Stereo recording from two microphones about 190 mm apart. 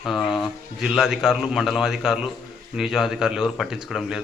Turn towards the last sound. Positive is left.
turn(degrees=0)  # may be behind; listen again after turning